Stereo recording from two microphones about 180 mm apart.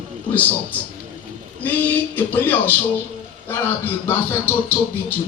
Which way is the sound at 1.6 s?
10° left (ahead or behind).